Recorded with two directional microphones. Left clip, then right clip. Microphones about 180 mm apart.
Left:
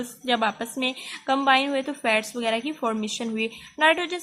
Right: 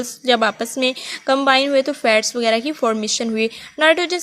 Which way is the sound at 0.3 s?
45° right (ahead or behind).